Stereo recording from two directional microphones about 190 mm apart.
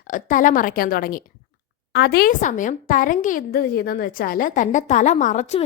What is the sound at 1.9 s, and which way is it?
A woman's voice, 60° left (ahead or behind).